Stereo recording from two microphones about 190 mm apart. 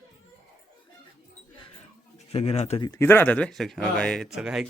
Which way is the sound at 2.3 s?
30° left (ahead or behind).